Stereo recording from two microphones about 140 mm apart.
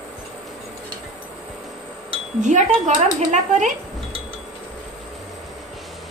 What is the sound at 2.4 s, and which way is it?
Speech, 60° right (ahead or behind).